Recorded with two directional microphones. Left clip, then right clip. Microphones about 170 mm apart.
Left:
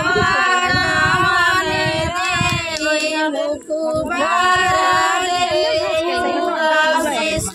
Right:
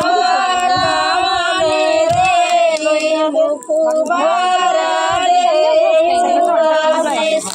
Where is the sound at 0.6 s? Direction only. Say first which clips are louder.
Right 2 dB; 45° left (ahead or behind).